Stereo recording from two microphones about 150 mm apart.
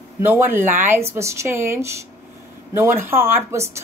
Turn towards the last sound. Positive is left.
turn(degrees=-20)  # may be behind; listen again after turning